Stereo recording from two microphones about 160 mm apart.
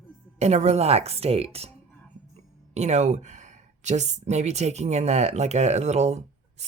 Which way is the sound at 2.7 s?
45° right (ahead or behind).